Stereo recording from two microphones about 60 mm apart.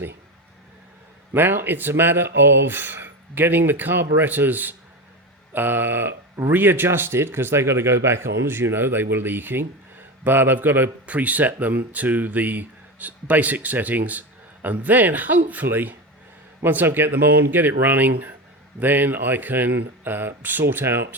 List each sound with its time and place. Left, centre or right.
1.3 s speech: right
11.0 s speech: right